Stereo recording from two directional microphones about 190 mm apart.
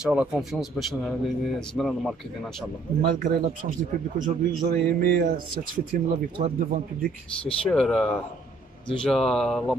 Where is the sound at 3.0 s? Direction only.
50° right (ahead or behind).